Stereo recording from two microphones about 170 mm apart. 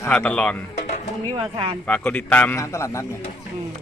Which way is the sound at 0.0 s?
10° left (ahead or behind).